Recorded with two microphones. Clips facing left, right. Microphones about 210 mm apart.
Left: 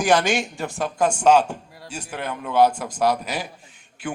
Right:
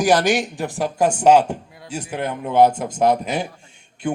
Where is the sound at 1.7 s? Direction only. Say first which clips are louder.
Right 1 dB; centre (ahead or behind).